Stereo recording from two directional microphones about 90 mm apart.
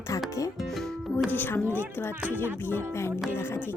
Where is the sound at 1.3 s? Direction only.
20° left (ahead or behind).